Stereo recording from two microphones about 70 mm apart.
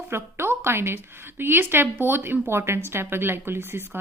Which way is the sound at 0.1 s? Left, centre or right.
Right.